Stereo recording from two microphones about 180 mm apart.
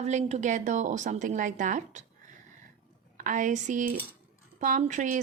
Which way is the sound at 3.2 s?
45° right (ahead or behind).